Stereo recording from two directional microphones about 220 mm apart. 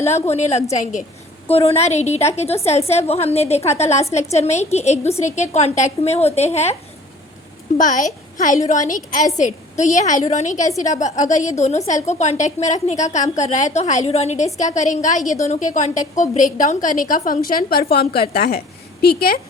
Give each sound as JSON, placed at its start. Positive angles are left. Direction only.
{"t": 0.3, "sound": "a woman's voice", "side_deg": 30}
{"t": 7.8, "sound": "a woman's voice", "side_deg": 35}